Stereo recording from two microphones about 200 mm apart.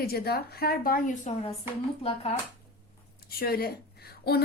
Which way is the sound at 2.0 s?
30° left (ahead or behind).